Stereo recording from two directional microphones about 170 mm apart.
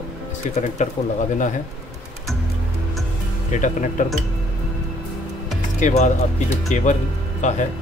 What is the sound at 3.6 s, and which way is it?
Speech, 50° left (ahead or behind).